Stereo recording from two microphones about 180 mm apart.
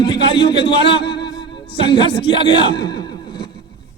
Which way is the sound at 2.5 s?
25° left (ahead or behind).